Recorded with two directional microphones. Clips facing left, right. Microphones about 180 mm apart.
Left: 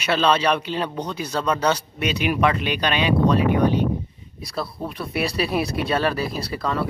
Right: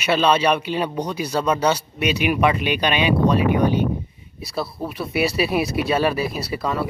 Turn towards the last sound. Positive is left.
turn(degrees=-5)  # may be behind; listen again after turning